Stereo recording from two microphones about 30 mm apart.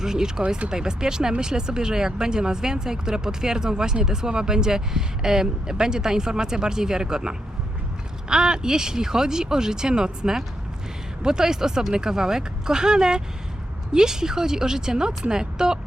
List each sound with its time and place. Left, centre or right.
0.0 s speech: centre